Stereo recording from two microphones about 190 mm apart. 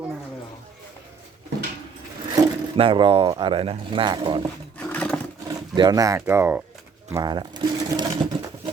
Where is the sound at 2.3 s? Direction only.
25° right (ahead or behind).